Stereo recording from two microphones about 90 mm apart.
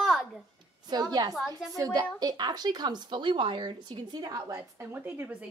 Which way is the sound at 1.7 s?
40° right (ahead or behind).